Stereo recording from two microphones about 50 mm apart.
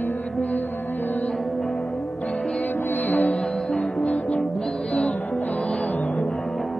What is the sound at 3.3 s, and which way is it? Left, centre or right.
Music, centre.